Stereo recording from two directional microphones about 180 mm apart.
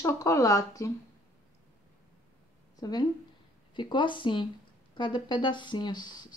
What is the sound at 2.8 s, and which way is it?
Speech, 20° left (ahead or behind).